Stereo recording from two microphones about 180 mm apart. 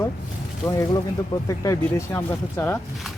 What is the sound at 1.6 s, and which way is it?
Speech, 15° left (ahead or behind).